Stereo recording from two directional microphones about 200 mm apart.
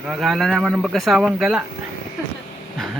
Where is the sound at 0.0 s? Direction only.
Centre (ahead or behind).